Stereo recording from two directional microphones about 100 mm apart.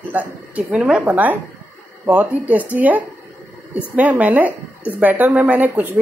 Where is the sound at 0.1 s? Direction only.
15° right (ahead or behind).